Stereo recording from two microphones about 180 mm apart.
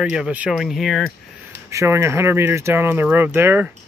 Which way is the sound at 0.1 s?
5° right (ahead or behind).